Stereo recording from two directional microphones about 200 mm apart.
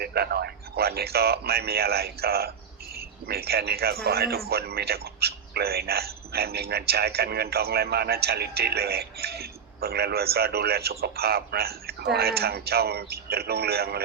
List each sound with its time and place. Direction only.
0.0 s speech: 50° right (ahead or behind)